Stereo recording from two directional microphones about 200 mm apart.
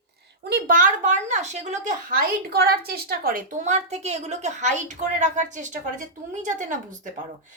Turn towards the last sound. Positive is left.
turn(degrees=-40)  # may be behind; listen again after turning